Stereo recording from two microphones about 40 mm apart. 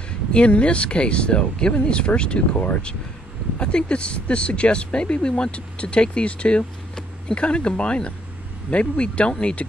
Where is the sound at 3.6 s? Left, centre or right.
Left.